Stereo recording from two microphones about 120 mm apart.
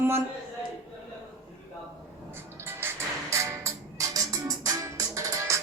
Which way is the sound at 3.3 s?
25° right (ahead or behind).